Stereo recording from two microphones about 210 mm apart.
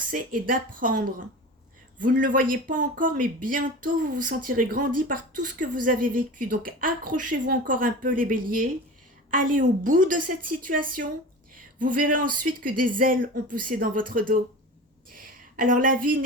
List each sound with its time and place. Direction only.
0.4 s speech: 40° right (ahead or behind)
9.6 s a woman's voice: 40° right (ahead or behind)